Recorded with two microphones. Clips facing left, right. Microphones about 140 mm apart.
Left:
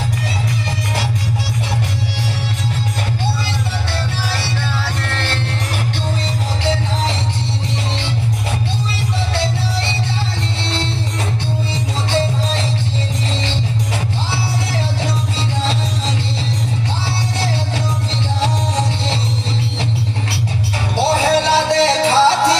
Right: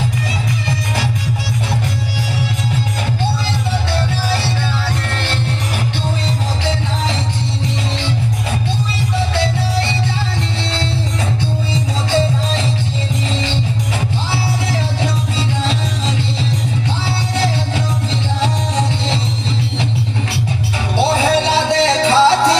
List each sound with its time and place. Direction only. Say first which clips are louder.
21.2 s music: even; 20° right (ahead or behind)